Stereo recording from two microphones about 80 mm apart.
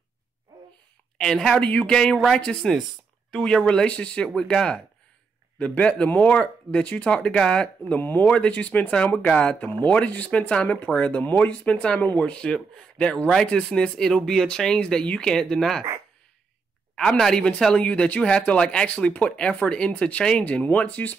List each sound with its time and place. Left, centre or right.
1.1 s a woman's voice: centre
16.9 s speech: centre